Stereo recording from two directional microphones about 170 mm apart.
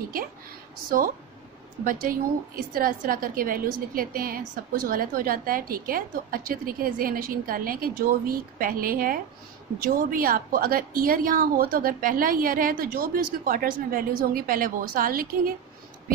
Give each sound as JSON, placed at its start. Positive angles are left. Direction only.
{"t": 0.8, "sound": "a woman's voice", "side_deg": -55}